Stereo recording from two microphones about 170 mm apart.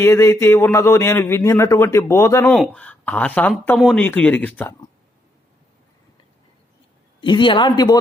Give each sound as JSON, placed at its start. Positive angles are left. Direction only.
{"t": 0.0, "sound": "a man's voice", "side_deg": 15}
{"t": 2.5, "sound": "a man's voice", "side_deg": 5}
{"t": 7.2, "sound": "speech", "side_deg": 30}